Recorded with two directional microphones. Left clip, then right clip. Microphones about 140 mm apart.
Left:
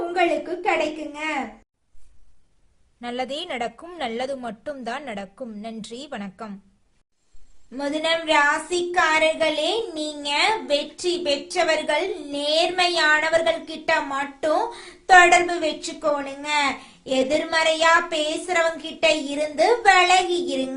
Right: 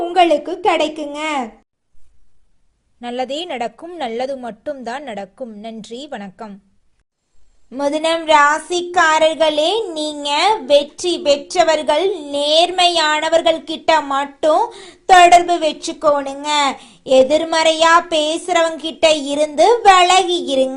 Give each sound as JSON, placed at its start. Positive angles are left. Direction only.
{"t": 0.1, "sound": "a woman's voice", "side_deg": -55}
{"t": 3.0, "sound": "a woman's voice", "side_deg": -30}
{"t": 7.8, "sound": "speech", "side_deg": -45}